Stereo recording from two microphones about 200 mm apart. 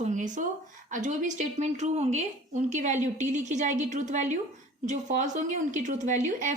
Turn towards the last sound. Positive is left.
turn(degrees=-35)  # may be behind; listen again after turning